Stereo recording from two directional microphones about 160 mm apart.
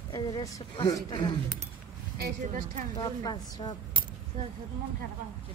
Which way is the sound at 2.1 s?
75° right (ahead or behind).